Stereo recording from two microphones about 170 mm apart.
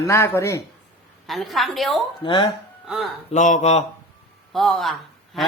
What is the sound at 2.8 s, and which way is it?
Speech, centre (ahead or behind).